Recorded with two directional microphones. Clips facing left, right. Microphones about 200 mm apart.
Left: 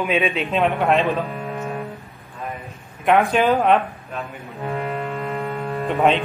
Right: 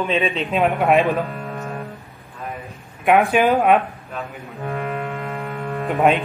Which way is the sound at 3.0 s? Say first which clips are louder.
Right 1 dB; centre (ahead or behind).